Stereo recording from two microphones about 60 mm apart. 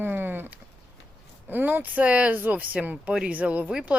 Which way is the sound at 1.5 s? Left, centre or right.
Right.